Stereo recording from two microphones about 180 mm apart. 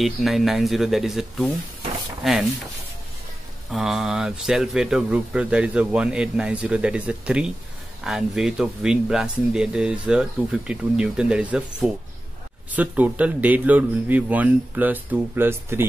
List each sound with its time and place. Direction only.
0.0 s speech: centre (ahead or behind)
3.7 s speech: centre (ahead or behind)